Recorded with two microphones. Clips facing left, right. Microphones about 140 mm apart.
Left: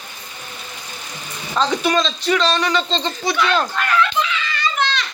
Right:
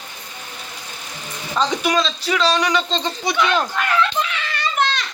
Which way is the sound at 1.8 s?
5° right (ahead or behind).